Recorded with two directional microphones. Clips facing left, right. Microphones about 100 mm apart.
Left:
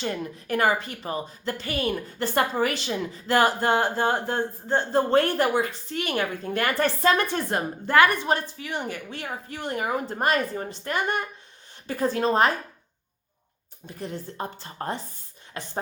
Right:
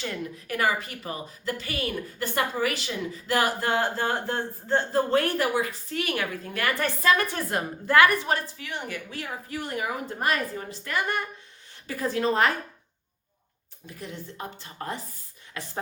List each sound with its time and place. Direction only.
0.0 s a woman's voice: 30° left (ahead or behind)
4.9 s a woman's voice: 30° left (ahead or behind)
13.8 s a woman's voice: 35° left (ahead or behind)